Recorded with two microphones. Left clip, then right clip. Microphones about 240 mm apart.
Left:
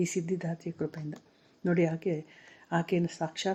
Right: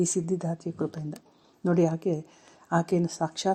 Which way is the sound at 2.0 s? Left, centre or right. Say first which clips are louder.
Right 3 dB; right.